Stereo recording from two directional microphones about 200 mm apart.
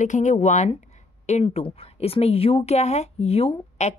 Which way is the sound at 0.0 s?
40° left (ahead or behind).